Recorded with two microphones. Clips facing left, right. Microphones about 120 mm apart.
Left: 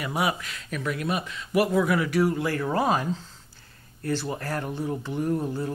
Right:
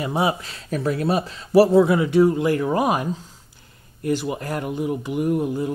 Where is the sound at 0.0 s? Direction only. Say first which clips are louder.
Right 5 dB; 25° right (ahead or behind).